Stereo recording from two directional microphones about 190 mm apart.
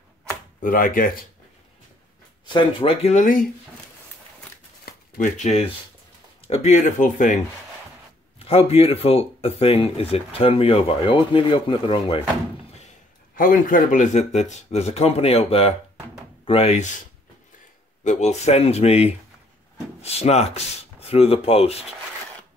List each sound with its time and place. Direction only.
0.6 s speech: 45° left (ahead or behind)
2.4 s speech: 25° left (ahead or behind); by 3.4 s 45° left (ahead or behind)
5.1 s speech: 40° left (ahead or behind)
8.4 s speech: 30° left (ahead or behind)
13.4 s speech: 45° left (ahead or behind)
18.0 s speech: 35° left (ahead or behind)